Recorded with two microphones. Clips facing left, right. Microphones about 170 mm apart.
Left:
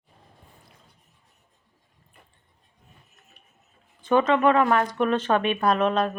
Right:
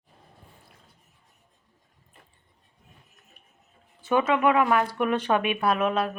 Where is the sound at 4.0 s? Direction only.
10° right (ahead or behind).